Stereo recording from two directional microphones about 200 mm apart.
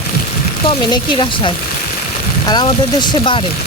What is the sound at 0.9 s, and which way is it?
Speech, 25° left (ahead or behind).